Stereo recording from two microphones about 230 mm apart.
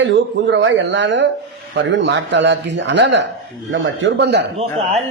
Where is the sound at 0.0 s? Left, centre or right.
Right.